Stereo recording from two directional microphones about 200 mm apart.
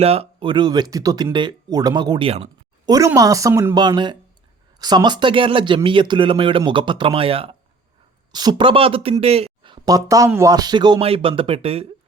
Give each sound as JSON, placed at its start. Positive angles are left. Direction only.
{"t": 0.0, "sound": "speech", "side_deg": -30}
{"t": 2.9, "sound": "a woman's voice", "side_deg": -15}